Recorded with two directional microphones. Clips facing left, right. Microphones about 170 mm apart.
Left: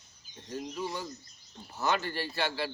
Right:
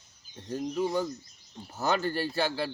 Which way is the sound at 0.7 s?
50° right (ahead or behind).